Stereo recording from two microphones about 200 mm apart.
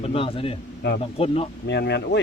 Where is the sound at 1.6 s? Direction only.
60° left (ahead or behind).